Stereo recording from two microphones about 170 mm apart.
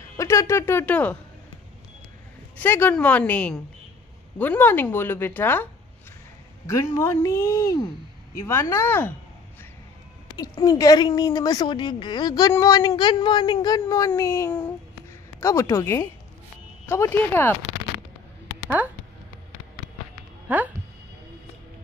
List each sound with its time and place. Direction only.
0.2 s a woman's voice: 20° left (ahead or behind)
2.5 s a woman's voice: 10° left (ahead or behind)
10.3 s a woman's voice: 20° left (ahead or behind)
20.4 s a sound: 10° right (ahead or behind)